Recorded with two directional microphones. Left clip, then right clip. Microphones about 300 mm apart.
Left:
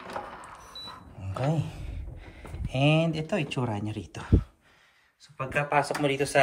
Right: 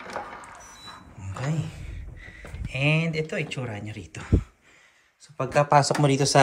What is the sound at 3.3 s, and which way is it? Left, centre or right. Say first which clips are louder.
Speech: left 1 dB; centre.